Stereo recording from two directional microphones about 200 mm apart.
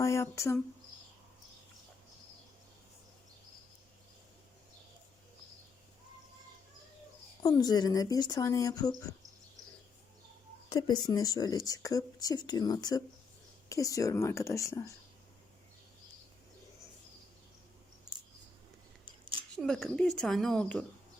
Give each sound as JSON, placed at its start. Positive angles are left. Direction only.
{"t": 0.0, "sound": "speech", "side_deg": 15}
{"t": 7.4, "sound": "speech", "side_deg": 20}
{"t": 10.7, "sound": "speech", "side_deg": 20}
{"t": 19.0, "sound": "scissors", "side_deg": -25}
{"t": 19.5, "sound": "a woman's voice", "side_deg": 0}